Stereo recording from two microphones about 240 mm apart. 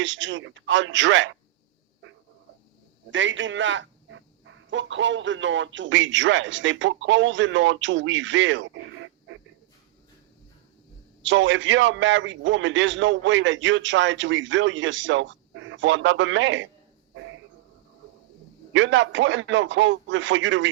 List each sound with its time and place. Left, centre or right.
0.0 s a man's voice: right
3.1 s a man's voice: right
11.2 s a man's voice: right
18.7 s a man's voice: right